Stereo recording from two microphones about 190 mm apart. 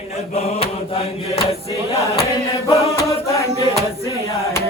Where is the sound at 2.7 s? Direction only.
15° left (ahead or behind).